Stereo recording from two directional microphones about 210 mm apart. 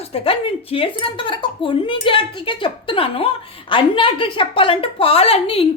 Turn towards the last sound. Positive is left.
turn(degrees=25)  # may be behind; listen again after turning